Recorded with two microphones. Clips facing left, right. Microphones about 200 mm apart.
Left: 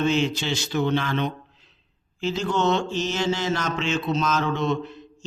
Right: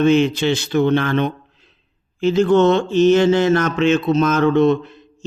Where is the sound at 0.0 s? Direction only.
60° right (ahead or behind).